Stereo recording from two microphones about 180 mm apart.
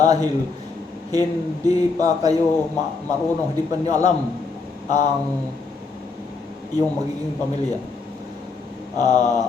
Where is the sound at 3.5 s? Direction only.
20° right (ahead or behind).